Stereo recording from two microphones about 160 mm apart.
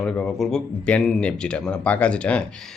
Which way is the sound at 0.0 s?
5° left (ahead or behind).